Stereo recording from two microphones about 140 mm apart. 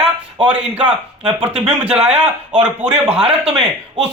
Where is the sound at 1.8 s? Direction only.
10° right (ahead or behind).